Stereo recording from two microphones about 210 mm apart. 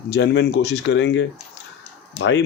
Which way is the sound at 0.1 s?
55° left (ahead or behind).